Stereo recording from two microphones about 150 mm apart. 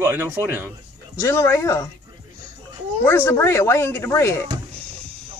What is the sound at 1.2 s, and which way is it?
Speech, 20° left (ahead or behind).